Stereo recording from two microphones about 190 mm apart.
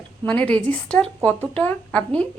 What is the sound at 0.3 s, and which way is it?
A woman's voice, 5° left (ahead or behind).